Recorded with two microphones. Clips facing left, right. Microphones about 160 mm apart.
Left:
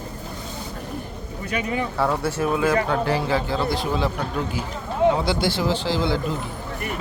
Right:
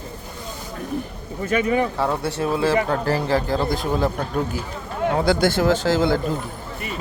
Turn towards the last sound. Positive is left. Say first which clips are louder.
# right 4 dB
turn(degrees=-45)  # may be behind; listen again after turning